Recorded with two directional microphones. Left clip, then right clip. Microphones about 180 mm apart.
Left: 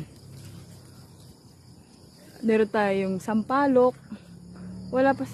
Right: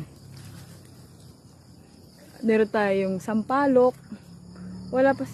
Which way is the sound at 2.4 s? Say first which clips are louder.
Right 1 dB; centre (ahead or behind).